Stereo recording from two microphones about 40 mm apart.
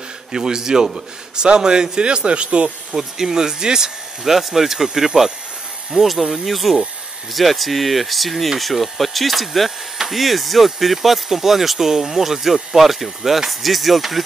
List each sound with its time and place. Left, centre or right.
0.3 s a man's voice: centre
2.9 s speech: centre